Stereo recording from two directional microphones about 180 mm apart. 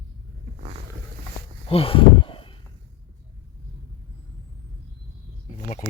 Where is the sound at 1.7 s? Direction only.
30° left (ahead or behind).